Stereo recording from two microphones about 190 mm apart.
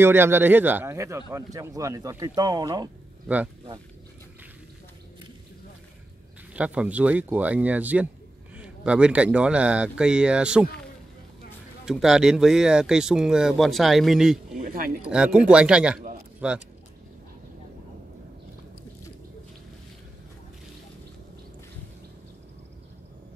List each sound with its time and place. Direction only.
0.0 s a man's voice: 10° right (ahead or behind)
6.5 s a man's voice: 5° right (ahead or behind)
11.8 s speech: centre (ahead or behind)
14.6 s speech: 50° right (ahead or behind)
15.0 s speech: 5° right (ahead or behind)